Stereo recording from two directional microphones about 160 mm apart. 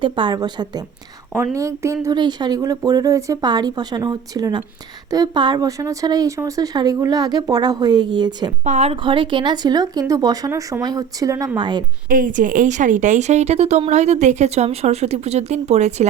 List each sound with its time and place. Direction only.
0.0 s a woman's voice: 30° right (ahead or behind)
8.6 s a woman's voice: 45° right (ahead or behind); by 11.8 s 30° right (ahead or behind)
12.0 s a woman's voice: 60° right (ahead or behind); by 16.0 s 45° right (ahead or behind)